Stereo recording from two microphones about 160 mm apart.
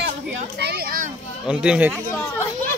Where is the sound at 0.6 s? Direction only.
85° right; by 1.1 s 65° right (ahead or behind).